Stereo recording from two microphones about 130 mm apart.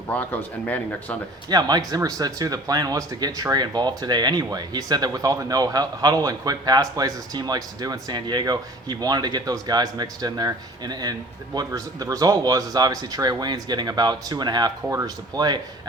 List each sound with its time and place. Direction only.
0.1 s speech: 15° left (ahead or behind)
1.5 s speech: 30° right (ahead or behind)